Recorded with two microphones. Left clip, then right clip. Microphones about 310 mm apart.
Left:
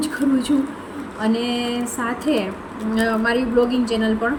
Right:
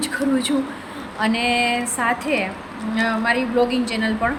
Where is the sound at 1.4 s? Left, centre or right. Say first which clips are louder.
Right 5 dB; right.